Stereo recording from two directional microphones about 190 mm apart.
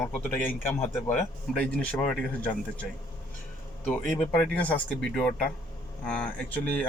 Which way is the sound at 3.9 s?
5° left (ahead or behind).